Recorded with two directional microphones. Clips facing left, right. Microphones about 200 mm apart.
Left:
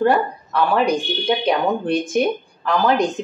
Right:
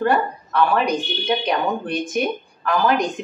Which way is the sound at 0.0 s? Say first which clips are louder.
Left 2 dB; 30° left (ahead or behind).